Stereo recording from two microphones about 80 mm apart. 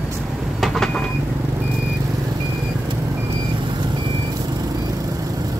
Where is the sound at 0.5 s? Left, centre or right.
Centre.